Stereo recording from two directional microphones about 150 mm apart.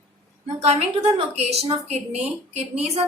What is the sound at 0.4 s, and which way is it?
A woman's voice, 45° right (ahead or behind).